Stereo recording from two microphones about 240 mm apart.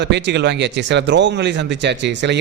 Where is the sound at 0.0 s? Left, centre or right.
Right.